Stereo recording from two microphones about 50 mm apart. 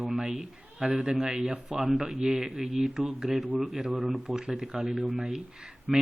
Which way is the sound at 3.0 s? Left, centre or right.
Centre.